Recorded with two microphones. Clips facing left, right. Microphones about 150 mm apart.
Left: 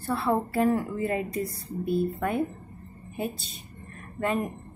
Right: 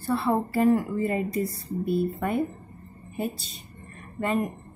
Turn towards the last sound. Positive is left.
turn(degrees=0)  # may be behind; listen again after turning